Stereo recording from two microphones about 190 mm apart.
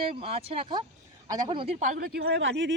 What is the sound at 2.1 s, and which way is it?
Speech, 60° right (ahead or behind).